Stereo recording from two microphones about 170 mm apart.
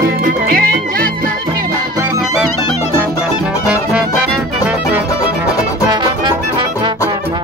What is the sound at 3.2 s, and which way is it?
Music, 5° right (ahead or behind).